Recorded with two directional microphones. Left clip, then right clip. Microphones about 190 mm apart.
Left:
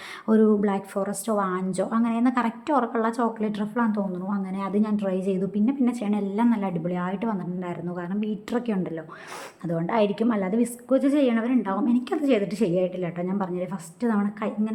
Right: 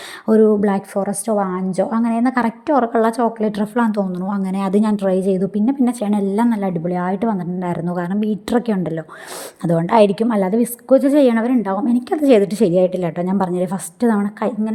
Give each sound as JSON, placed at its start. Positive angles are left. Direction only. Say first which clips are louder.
{"t": 0.3, "sound": "a woman's voice", "louder": "right 8 dB", "side_deg": -30}